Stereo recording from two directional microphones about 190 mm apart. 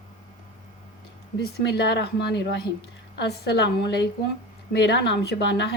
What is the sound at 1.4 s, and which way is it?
A woman's voice, 60° left (ahead or behind).